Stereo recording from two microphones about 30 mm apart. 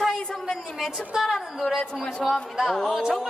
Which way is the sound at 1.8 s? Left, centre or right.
Left.